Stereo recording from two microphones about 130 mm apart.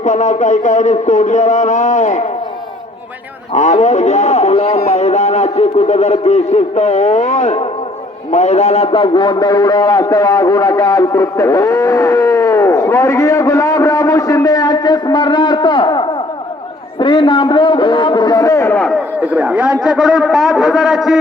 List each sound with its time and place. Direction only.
0.0 s speech: 70° left (ahead or behind)
3.5 s a man's voice: 65° left (ahead or behind); by 18.8 s 20° left (ahead or behind)
18.8 s a man's voice: 5° left (ahead or behind)
19.2 s a man's voice: 10° right (ahead or behind)